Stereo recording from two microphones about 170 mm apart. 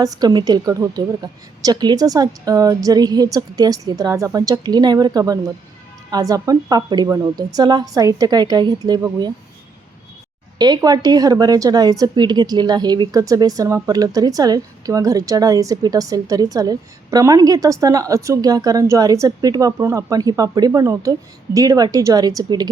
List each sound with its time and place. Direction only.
0.0 s a woman's voice: 20° right (ahead or behind)
10.6 s a woman's voice: 25° right (ahead or behind)